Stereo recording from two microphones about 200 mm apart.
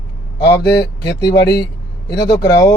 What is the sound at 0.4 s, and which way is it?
Speech, 20° left (ahead or behind).